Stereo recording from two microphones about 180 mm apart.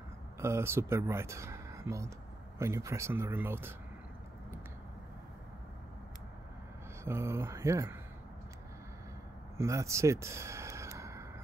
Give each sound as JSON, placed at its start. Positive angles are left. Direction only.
{"t": 0.4, "sound": "speech", "side_deg": -15}
{"t": 7.1, "sound": "speech", "side_deg": -15}
{"t": 9.6, "sound": "sigh", "side_deg": -15}